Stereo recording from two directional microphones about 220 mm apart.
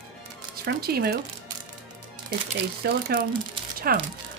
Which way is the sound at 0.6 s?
45° right (ahead or behind).